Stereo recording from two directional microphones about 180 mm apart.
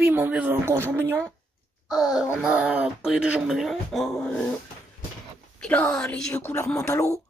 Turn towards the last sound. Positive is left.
turn(degrees=15)  # may be behind; listen again after turning